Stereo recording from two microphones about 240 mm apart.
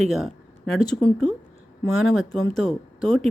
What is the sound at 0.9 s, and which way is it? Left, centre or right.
Speech, centre.